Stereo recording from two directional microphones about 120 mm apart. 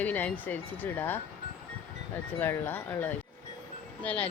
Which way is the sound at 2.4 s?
15° left (ahead or behind).